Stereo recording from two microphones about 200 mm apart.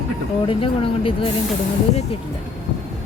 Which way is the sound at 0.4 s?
25° left (ahead or behind).